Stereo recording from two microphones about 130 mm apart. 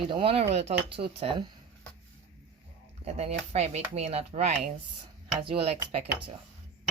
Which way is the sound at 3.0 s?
55° right (ahead or behind).